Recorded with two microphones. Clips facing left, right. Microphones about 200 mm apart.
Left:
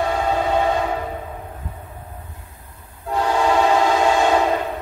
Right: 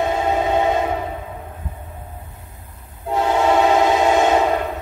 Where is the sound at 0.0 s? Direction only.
20° right (ahead or behind).